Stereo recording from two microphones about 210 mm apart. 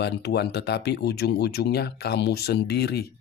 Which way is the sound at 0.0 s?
50° left (ahead or behind).